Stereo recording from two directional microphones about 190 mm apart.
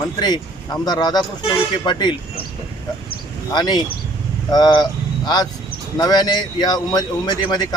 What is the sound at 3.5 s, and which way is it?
A man's voice, 20° left (ahead or behind).